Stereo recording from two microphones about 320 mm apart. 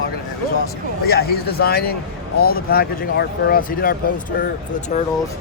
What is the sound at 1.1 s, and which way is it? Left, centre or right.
Speech, left.